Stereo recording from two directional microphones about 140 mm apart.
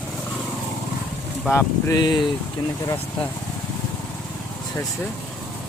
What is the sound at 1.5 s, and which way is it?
Speech, 25° left (ahead or behind).